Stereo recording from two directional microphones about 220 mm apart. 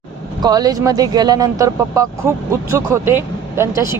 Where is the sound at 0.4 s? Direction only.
15° right (ahead or behind).